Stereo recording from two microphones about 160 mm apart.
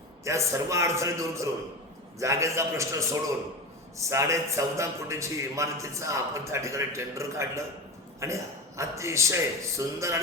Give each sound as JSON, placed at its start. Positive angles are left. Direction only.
{"t": 0.3, "sound": "a man's voice", "side_deg": -20}